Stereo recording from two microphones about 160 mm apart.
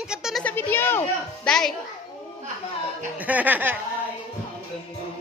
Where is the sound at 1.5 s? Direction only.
5° left (ahead or behind).